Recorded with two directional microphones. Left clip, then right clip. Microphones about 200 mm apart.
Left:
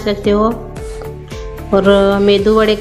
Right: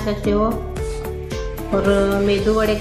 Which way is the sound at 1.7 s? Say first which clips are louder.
Left 7 dB; 55° left (ahead or behind).